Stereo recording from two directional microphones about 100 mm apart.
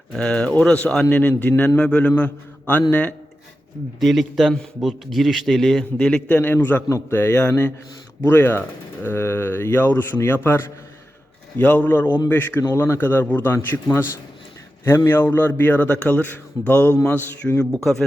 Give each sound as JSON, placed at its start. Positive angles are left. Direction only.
{"t": 0.1, "sound": "a man's voice", "side_deg": 10}
{"t": 4.0, "sound": "a man's voice", "side_deg": 0}